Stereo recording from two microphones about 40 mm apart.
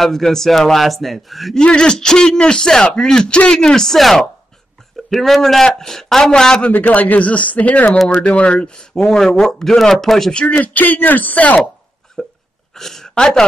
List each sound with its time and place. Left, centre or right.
0.0 s a man's voice: centre
1.6 s speech: left
3.3 s speech: left
3.5 s a man's voice: centre
6.7 s speech: left
8.5 s a man's voice: centre
10.3 s speech: left
12.2 s hiccup: centre
12.7 s a sound: centre
13.1 s speech: centre